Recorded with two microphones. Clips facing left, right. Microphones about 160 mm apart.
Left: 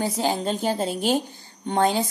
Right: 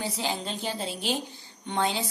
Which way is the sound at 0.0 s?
45° left (ahead or behind).